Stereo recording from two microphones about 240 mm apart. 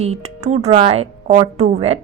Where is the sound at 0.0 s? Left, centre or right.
Right.